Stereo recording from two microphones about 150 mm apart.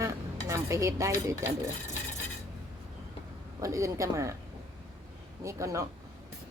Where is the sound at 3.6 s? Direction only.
20° right (ahead or behind).